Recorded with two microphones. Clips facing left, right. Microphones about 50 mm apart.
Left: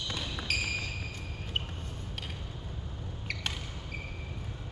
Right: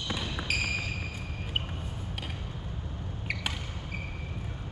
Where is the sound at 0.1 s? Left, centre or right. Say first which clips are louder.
Right 3 dB; centre.